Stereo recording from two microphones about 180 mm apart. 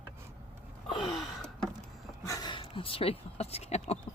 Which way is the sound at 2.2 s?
20° left (ahead or behind).